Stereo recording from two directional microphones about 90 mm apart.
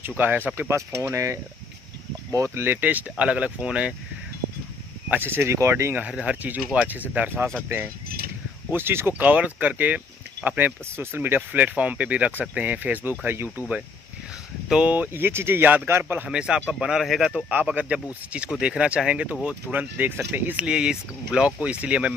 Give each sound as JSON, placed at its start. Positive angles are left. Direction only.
{"t": 0.6, "sound": "speech", "side_deg": -30}
{"t": 5.1, "sound": "speech", "side_deg": -25}
{"t": 5.9, "sound": "speech", "side_deg": -15}
{"t": 16.3, "sound": "speech", "side_deg": -10}
{"t": 20.5, "sound": "speech", "side_deg": -10}